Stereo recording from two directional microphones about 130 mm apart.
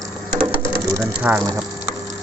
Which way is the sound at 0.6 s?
15° right (ahead or behind).